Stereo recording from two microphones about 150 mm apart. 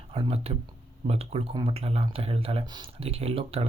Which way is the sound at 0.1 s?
40° right (ahead or behind).